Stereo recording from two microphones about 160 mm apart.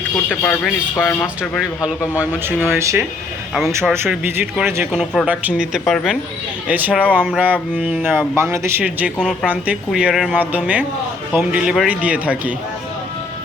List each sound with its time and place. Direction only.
0.3 s speech: 10° left (ahead or behind)
2.1 s speech: 10° right (ahead or behind)
6.7 s speech: 10° right (ahead or behind)
9.1 s speech: 5° left (ahead or behind)
9.5 s speech: 10° right (ahead or behind)